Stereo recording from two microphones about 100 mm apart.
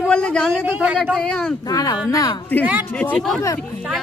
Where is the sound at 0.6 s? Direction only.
15° right (ahead or behind).